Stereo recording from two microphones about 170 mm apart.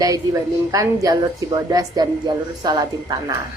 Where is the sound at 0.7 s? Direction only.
20° right (ahead or behind).